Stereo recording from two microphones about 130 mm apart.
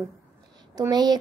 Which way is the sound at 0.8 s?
30° right (ahead or behind).